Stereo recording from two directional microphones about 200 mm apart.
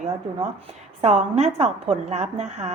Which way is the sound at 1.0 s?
35° right (ahead or behind).